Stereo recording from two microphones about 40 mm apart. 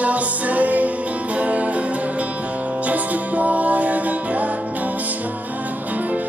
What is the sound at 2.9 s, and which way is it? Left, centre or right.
Music, right.